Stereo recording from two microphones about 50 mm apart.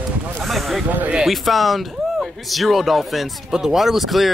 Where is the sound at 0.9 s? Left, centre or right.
Right.